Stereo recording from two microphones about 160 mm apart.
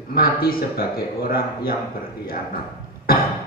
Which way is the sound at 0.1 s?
65° left (ahead or behind).